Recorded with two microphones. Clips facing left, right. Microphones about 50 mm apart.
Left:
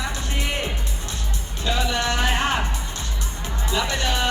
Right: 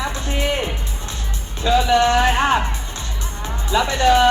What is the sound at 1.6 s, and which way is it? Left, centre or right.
Speech, right.